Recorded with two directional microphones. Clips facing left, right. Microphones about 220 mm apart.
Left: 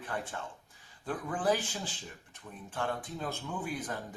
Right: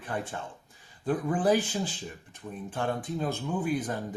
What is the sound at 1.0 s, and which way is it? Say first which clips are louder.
Speech: right 6 dB; 15° right (ahead or behind).